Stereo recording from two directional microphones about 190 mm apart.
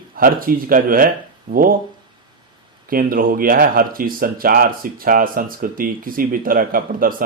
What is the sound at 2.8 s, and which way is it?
Speech, 50° right (ahead or behind).